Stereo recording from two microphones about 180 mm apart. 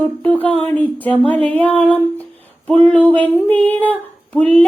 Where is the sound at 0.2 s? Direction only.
10° left (ahead or behind).